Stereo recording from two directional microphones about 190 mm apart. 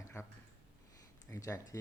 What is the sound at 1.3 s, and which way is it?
Speech, 15° left (ahead or behind).